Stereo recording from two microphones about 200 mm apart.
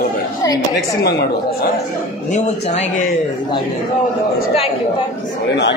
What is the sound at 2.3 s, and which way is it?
Speech, 40° left (ahead or behind).